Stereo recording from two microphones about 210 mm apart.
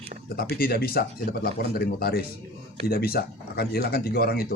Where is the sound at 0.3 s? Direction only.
45° left (ahead or behind).